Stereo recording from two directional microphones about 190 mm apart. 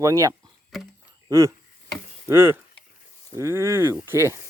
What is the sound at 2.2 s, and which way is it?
Speech, 10° right (ahead or behind).